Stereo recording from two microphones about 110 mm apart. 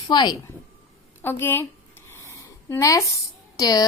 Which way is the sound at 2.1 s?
25° left (ahead or behind).